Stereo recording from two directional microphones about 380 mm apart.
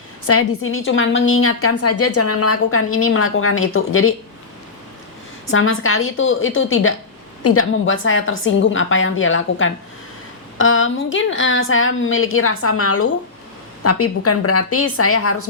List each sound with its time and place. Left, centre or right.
0.3 s a woman's voice: left
5.5 s a woman's voice: left